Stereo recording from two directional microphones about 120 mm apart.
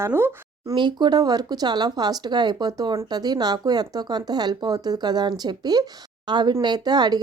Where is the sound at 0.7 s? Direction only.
40° right (ahead or behind).